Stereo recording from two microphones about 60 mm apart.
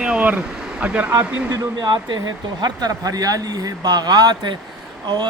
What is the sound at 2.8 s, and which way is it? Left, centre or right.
Speech, right.